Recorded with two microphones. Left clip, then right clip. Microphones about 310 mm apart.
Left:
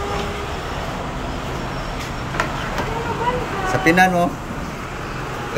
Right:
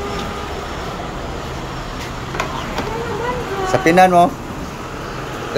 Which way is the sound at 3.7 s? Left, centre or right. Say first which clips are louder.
Right 4 dB; centre.